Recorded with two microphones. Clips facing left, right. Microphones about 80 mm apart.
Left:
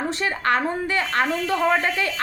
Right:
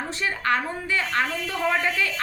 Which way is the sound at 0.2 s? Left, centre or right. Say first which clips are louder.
Left 1 dB; left.